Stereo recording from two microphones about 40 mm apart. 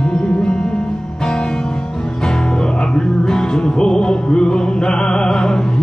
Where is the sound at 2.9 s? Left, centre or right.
Centre.